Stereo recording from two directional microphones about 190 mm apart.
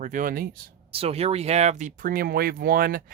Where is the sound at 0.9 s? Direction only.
30° right (ahead or behind).